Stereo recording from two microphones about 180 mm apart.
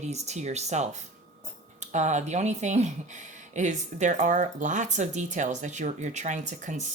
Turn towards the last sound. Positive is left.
turn(degrees=-40)  # may be behind; listen again after turning